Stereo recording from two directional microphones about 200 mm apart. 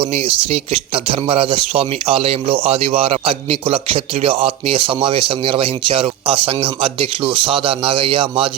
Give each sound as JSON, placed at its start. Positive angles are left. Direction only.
{"t": 0.0, "sound": "speech", "side_deg": -30}